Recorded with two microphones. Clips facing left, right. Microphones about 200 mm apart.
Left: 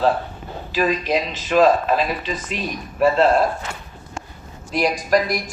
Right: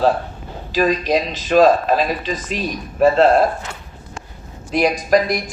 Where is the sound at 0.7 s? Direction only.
40° right (ahead or behind).